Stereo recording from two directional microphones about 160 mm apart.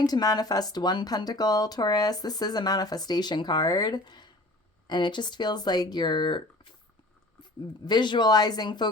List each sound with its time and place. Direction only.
0.0 s speech: 25° left (ahead or behind)
7.9 s speech: 30° left (ahead or behind)